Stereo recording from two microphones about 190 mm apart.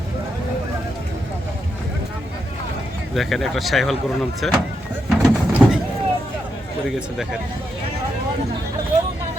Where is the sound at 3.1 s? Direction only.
Centre (ahead or behind).